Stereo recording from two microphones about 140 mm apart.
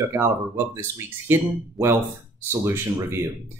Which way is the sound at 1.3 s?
20° right (ahead or behind).